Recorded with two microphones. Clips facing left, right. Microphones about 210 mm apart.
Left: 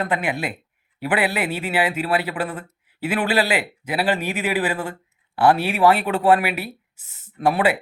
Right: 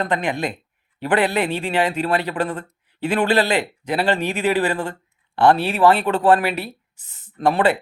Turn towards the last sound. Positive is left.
turn(degrees=10)  # may be behind; listen again after turning